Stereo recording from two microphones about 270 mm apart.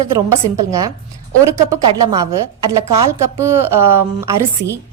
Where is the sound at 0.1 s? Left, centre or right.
Centre.